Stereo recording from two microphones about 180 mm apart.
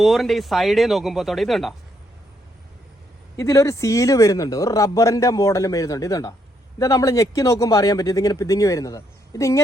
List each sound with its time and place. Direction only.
0.0 s speech: centre (ahead or behind)
3.3 s speech: 15° left (ahead or behind)